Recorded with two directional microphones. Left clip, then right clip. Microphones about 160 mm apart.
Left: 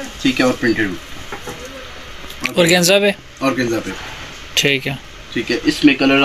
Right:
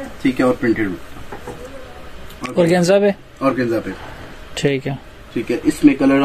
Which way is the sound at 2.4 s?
20° right (ahead or behind).